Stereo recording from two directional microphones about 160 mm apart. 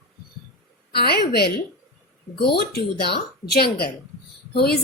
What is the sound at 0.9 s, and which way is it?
A woman's voice, 80° left.